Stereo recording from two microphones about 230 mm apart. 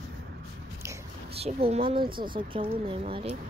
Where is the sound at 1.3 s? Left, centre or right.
Right.